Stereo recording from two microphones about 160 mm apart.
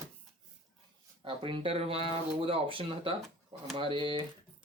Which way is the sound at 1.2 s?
30° right (ahead or behind).